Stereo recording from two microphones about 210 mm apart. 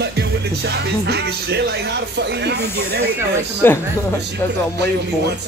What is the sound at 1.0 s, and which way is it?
Speech, 50° right (ahead or behind).